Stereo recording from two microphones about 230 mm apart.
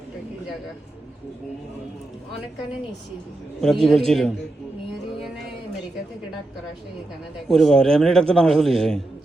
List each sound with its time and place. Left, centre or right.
3.6 s a man's voice: centre
7.4 s a man's voice: centre